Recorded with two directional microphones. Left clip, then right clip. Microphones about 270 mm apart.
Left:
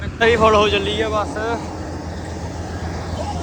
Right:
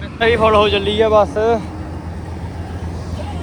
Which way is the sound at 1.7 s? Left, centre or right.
Left.